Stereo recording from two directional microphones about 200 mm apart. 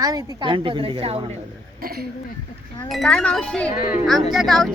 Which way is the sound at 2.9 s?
Centre (ahead or behind).